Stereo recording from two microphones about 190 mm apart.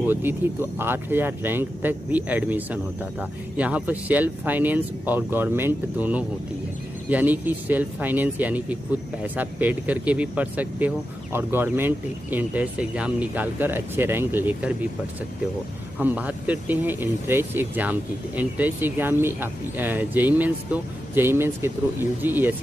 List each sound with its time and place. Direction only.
0.0 s speech: 10° right (ahead or behind)
16.0 s speech: 10° right (ahead or behind)